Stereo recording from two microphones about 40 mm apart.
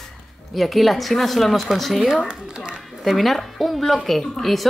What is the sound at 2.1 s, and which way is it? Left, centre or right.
Speech, right.